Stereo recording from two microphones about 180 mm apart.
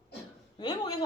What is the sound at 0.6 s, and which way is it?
Speech, 25° left (ahead or behind).